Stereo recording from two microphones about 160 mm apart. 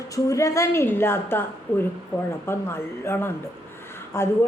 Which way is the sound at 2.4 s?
15° left (ahead or behind).